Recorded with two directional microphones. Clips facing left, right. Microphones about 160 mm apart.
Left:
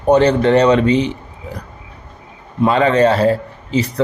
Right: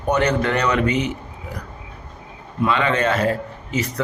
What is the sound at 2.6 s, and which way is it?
A man's voice, 35° left (ahead or behind).